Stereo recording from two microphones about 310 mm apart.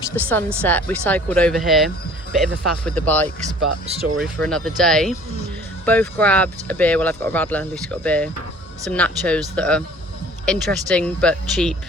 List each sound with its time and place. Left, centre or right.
0.3 s speech: centre
3.4 s speech: centre
4.2 s speech: centre